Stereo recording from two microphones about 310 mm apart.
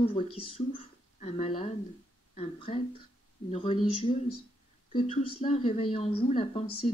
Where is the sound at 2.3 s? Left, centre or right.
Centre.